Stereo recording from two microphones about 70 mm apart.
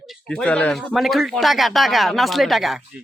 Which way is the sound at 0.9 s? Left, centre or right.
Centre.